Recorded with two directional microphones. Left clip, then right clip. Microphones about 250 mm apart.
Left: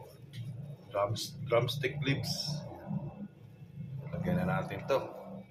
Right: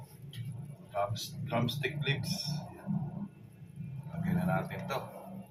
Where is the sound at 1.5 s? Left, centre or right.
Left.